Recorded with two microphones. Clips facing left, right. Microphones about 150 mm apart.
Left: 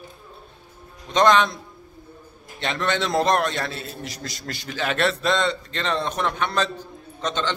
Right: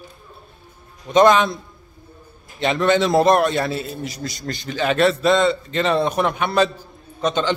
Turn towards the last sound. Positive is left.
turn(degrees=-10)  # may be behind; listen again after turning